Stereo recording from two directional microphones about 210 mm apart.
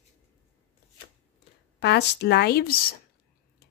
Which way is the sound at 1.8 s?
50° left (ahead or behind).